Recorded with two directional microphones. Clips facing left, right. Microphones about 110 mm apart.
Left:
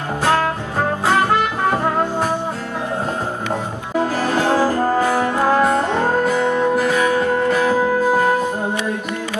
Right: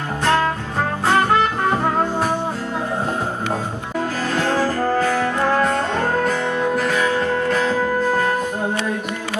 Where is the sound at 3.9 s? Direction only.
15° left (ahead or behind).